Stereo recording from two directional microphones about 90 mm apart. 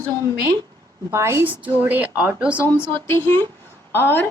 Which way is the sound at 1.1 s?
30° right (ahead or behind).